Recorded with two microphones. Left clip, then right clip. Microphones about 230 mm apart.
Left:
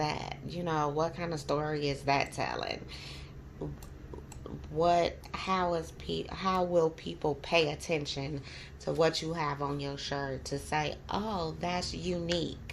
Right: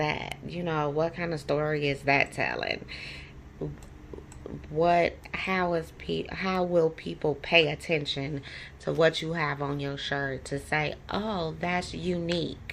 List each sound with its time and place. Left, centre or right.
0.0 s speech: right
4.8 s speech: right